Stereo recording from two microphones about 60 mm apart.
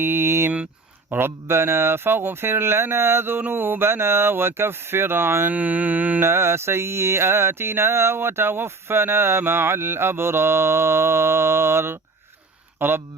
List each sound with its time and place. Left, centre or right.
0.0 s speech: right
1.1 s mantra: right
3.5 s speech: right
5.5 s mantra: right
6.2 s mantra: right
12.8 s speech: right